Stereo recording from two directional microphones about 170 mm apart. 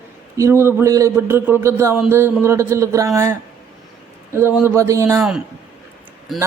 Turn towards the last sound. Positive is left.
turn(degrees=0)  # may be behind; listen again after turning